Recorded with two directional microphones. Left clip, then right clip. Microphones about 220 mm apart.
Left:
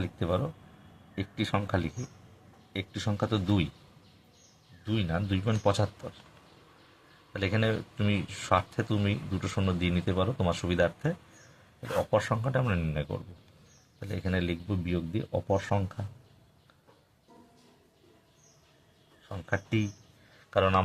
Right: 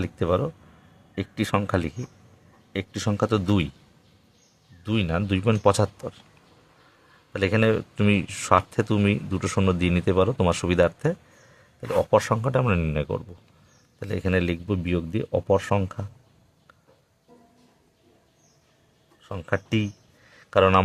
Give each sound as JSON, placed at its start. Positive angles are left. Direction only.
{"t": 0.0, "sound": "speech", "side_deg": -45}
{"t": 4.9, "sound": "speech", "side_deg": -50}
{"t": 7.3, "sound": "speech", "side_deg": -45}
{"t": 19.3, "sound": "speech", "side_deg": -45}